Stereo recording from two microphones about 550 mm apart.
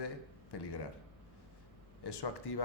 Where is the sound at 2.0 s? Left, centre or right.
Left.